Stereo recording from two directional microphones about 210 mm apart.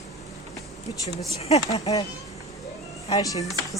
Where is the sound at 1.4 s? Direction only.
30° left (ahead or behind).